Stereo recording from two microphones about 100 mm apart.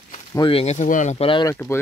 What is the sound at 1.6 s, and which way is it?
Speech, 35° left (ahead or behind).